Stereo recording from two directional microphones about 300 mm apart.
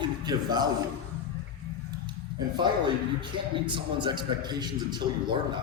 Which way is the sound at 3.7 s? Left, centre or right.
Centre.